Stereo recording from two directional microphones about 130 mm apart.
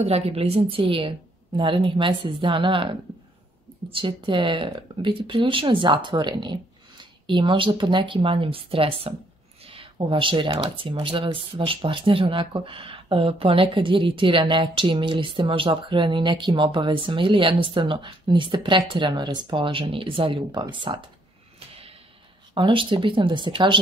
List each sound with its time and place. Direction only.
0.0 s a woman's voice: 55° right (ahead or behind)
22.5 s speech: 40° right (ahead or behind)